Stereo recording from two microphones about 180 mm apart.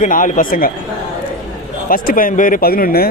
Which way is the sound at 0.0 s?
45° left (ahead or behind).